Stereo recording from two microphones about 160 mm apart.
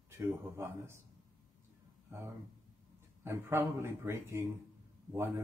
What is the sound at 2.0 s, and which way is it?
Speech, 15° right (ahead or behind).